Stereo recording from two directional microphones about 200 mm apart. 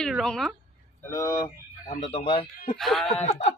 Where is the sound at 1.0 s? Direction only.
15° left (ahead or behind).